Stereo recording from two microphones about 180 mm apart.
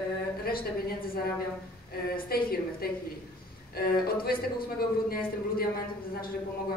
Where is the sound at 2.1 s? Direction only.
55° left (ahead or behind).